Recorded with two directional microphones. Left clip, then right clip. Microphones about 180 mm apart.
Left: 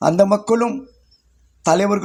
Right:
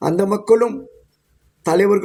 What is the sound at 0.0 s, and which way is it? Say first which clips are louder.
Speech: left 4 dB; 25° left (ahead or behind).